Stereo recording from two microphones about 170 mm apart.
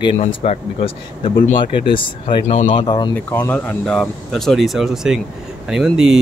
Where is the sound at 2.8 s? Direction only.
25° left (ahead or behind).